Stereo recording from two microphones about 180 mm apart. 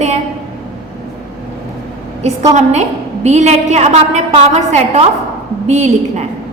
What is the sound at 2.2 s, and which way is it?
A woman's voice, 40° right (ahead or behind).